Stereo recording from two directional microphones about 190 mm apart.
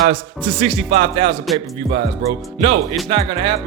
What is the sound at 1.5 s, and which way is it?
Music, centre (ahead or behind).